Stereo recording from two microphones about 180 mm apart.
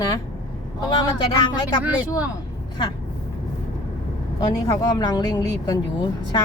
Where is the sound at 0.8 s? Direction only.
25° left (ahead or behind).